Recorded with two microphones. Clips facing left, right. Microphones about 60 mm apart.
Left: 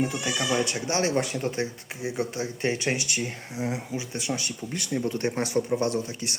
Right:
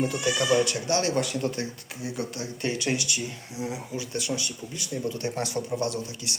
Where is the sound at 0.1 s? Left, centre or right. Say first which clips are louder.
Right 3 dB; centre; by 3.8 s left.